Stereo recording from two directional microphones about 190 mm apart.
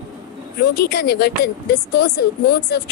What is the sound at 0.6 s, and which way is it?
A woman's voice, 55° left (ahead or behind).